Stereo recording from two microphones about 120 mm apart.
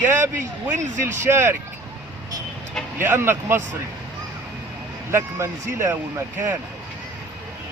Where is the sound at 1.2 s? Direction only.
20° right (ahead or behind).